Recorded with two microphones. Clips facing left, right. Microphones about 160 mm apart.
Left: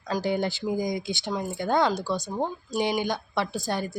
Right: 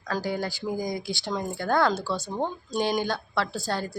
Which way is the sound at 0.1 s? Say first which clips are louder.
Left 3 dB; 20° left (ahead or behind).